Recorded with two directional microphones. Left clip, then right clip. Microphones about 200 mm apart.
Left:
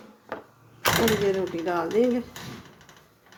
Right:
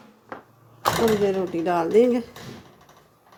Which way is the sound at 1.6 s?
45° right (ahead or behind).